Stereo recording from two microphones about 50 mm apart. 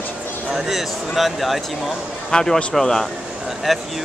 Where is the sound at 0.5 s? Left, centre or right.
Centre.